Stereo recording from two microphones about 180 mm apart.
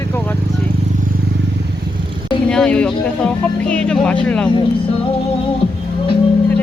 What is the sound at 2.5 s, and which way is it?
Speech, 5° left (ahead or behind).